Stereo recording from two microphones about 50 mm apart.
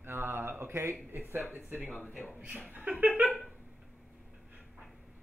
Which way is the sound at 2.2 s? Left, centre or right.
Left.